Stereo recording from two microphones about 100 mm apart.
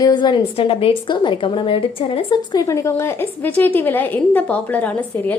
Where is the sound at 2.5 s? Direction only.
35° left (ahead or behind).